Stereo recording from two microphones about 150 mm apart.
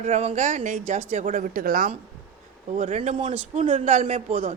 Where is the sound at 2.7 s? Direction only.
55° right (ahead or behind).